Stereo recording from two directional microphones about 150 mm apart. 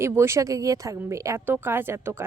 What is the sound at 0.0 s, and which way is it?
Speech, 15° right (ahead or behind).